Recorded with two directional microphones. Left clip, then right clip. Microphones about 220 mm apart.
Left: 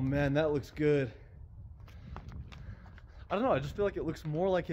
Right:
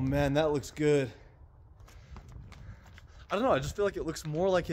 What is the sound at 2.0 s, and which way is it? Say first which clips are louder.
Clip-clop: left 7 dB; 10° left (ahead or behind).